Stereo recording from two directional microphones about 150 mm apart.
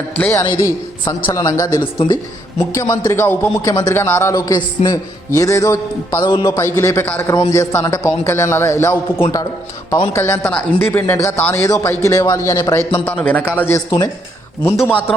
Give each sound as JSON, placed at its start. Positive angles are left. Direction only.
{"t": 0.2, "sound": "a man's voice", "side_deg": 15}